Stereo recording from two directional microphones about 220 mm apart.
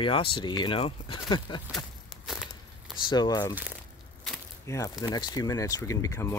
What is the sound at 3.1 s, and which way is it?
Speech, 20° left (ahead or behind).